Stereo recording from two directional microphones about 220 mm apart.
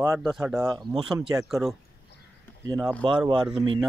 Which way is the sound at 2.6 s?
15° right (ahead or behind).